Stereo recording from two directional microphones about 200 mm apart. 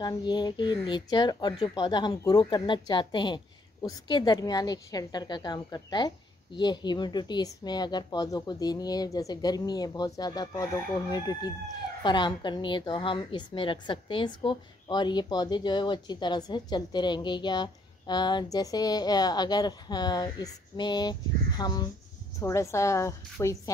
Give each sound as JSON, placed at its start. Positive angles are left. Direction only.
{"t": 0.0, "sound": "a woman's voice", "side_deg": 20}